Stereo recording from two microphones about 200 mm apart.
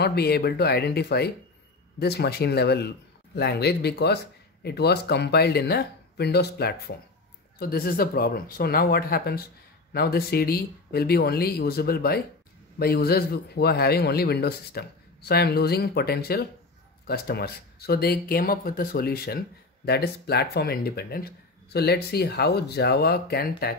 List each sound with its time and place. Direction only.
0.0 s speech: 55° left (ahead or behind)